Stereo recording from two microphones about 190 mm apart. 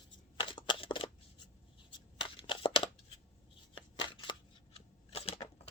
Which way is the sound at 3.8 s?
25° left (ahead or behind).